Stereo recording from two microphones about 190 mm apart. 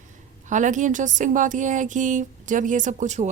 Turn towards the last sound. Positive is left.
turn(degrees=-40)  # may be behind; listen again after turning